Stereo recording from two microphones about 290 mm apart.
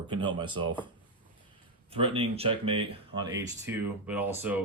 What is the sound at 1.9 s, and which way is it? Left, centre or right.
Speech, centre.